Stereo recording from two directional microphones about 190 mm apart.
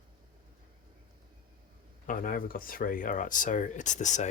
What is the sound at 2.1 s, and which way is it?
Speech, 45° left (ahead or behind).